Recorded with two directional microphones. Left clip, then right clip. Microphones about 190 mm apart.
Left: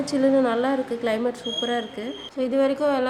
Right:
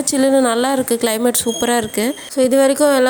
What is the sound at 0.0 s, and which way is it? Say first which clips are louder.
A woman's voice: right 6 dB; 50° right (ahead or behind).